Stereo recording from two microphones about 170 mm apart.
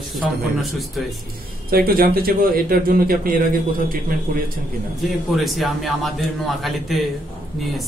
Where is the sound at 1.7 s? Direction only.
60° right (ahead or behind).